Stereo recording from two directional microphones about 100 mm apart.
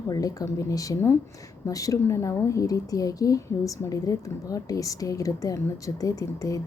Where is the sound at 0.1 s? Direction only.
35° left (ahead or behind).